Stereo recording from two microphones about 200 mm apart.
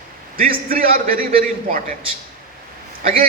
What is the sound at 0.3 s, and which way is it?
Speech, 45° right (ahead or behind).